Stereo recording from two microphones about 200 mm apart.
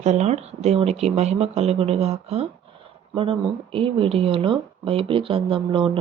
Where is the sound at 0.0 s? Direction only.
35° right (ahead or behind).